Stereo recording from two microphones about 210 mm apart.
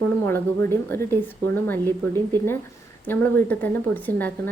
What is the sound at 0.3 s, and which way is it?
A woman's voice, 10° left (ahead or behind).